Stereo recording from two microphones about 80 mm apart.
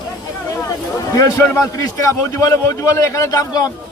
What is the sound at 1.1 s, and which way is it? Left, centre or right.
A man's voice, left.